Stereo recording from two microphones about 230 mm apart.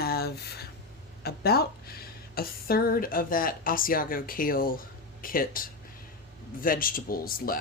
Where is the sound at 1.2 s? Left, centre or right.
Left.